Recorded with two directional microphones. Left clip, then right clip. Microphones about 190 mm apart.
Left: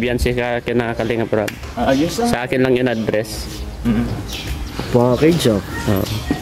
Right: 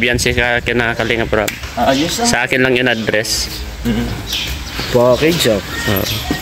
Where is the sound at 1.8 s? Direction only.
10° right (ahead or behind).